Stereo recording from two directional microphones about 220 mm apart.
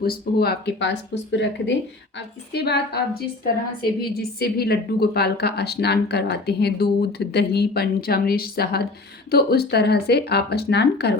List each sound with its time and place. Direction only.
0.0 s a woman's voice: 45° left (ahead or behind)
4.0 s a woman's voice: 45° left (ahead or behind)